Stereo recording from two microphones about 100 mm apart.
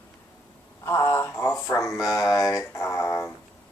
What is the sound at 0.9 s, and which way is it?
Radio, 30° left (ahead or behind).